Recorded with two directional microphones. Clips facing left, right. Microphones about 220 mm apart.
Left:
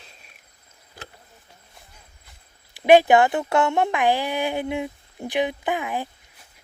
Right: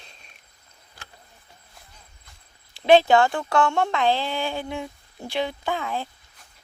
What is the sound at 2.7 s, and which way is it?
Speech, 15° left (ahead or behind).